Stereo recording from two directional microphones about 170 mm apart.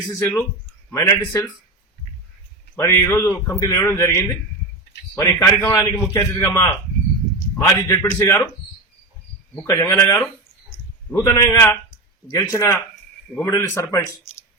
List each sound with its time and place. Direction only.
0.1 s a man's voice: 15° left (ahead or behind)
2.7 s a man's voice: 15° left (ahead or behind)
9.6 s a man's voice: 15° left (ahead or behind)